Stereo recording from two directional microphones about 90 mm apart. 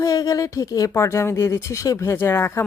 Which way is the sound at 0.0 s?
40° left (ahead or behind).